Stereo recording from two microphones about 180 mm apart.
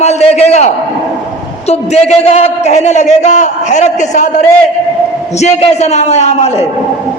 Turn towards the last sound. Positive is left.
turn(degrees=35)  # may be behind; listen again after turning